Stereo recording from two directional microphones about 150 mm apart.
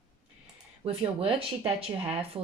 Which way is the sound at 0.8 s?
40° right (ahead or behind).